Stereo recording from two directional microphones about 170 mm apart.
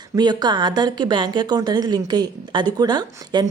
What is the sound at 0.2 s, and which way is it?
A woman's voice, 25° right (ahead or behind).